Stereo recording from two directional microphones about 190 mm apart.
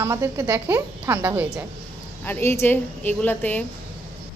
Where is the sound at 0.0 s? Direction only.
15° right (ahead or behind).